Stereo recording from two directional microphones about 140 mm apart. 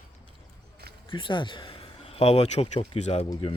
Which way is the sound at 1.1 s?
35° left (ahead or behind).